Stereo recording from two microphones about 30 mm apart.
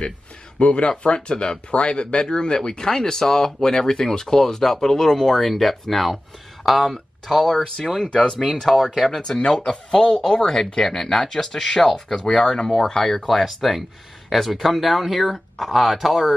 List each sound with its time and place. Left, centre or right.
0.6 s speech: left; by 7.6 s centre
8.1 s speech: left
8.6 s speech: centre
9.5 s speech: centre
13.3 s speech: centre